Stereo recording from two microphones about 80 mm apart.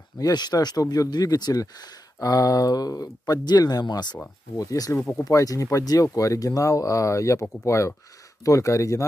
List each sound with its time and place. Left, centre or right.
0.2 s speech: left
4.6 s speech: left